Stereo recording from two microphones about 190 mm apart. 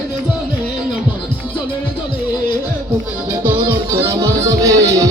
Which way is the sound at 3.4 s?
10° right (ahead or behind).